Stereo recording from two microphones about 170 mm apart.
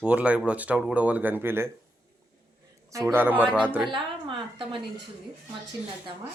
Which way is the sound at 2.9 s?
15° right (ahead or behind).